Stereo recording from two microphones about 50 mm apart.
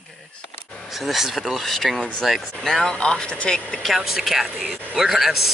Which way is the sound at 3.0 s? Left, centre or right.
Left.